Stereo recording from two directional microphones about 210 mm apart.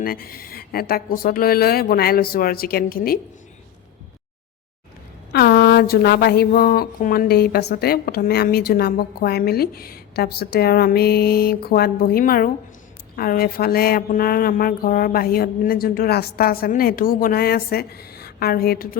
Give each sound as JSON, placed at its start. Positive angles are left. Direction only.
{"t": 0.0, "sound": "speech", "side_deg": 45}
{"t": 5.3, "sound": "speech", "side_deg": 50}